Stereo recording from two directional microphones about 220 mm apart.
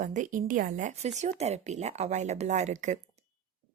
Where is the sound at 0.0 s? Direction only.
35° right (ahead or behind).